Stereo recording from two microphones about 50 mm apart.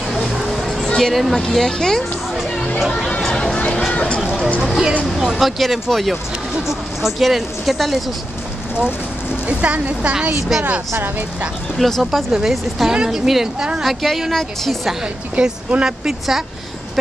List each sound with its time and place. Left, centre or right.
0.1 s a sound: centre
1.3 s speech: centre
3.2 s a sound: centre
4.6 s speech: centre
9.5 s a woman's voice: right
11.8 s speech: centre
15.3 s speech: centre